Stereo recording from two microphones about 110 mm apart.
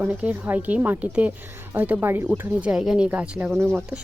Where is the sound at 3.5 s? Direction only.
25° right (ahead or behind).